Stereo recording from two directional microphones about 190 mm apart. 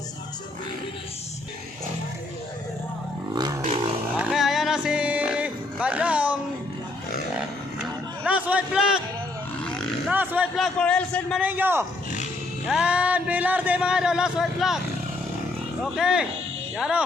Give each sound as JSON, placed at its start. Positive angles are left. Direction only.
{"t": 3.3, "sound": "a sound", "side_deg": -20}
{"t": 4.2, "sound": "music", "side_deg": 0}
{"t": 7.3, "sound": "vehicle", "side_deg": -5}
{"t": 10.1, "sound": "speech", "side_deg": -10}
{"t": 10.8, "sound": "speech", "side_deg": 5}
{"t": 11.4, "sound": "speech", "side_deg": -10}
{"t": 15.8, "sound": "speech", "side_deg": -5}